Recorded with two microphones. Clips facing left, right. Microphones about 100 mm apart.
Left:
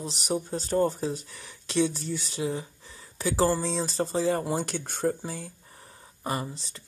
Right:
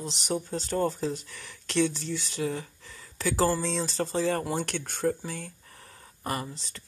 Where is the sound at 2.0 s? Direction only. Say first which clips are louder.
Even; 20° left (ahead or behind).